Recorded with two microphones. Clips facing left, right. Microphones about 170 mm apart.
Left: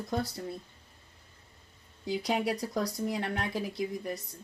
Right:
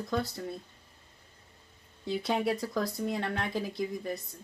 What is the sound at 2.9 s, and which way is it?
Speech, 25° right (ahead or behind).